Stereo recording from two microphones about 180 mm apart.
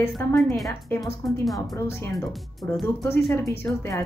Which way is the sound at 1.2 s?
Centre (ahead or behind).